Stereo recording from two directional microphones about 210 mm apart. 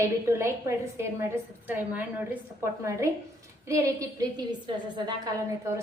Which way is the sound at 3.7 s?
15° right (ahead or behind).